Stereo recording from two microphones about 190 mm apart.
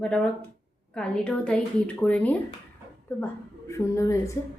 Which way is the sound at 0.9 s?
5° left (ahead or behind).